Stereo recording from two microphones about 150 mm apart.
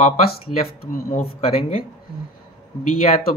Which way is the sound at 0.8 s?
65° left (ahead or behind).